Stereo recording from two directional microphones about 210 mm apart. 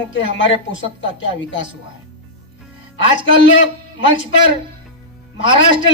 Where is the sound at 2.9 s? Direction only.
60° left (ahead or behind).